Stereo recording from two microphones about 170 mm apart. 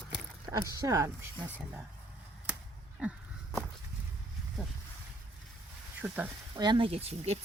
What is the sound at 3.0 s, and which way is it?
Speech, 5° right (ahead or behind).